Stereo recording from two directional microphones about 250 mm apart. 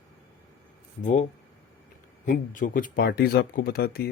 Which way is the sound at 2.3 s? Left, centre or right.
Left.